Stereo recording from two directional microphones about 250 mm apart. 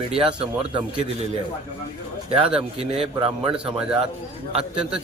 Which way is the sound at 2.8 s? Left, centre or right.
Right.